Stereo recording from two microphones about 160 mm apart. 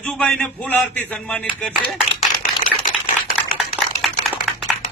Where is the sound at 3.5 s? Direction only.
Centre (ahead or behind).